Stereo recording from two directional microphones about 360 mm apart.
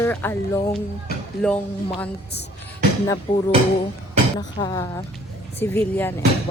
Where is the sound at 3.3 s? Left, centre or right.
Centre.